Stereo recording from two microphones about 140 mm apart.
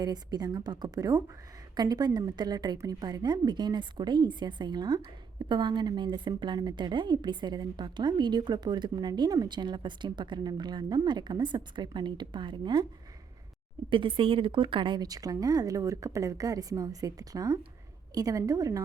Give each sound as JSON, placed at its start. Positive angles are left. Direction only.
{"t": 0.0, "sound": "a woman's voice", "side_deg": -30}
{"t": 13.9, "sound": "speech", "side_deg": -35}